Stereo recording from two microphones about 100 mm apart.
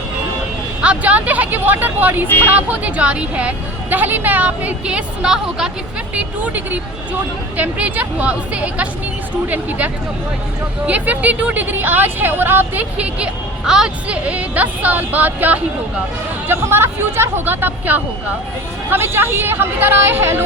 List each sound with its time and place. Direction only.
0.8 s a woman's voice: 15° right (ahead or behind)